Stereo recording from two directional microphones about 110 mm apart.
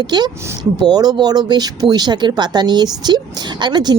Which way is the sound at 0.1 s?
40° right (ahead or behind).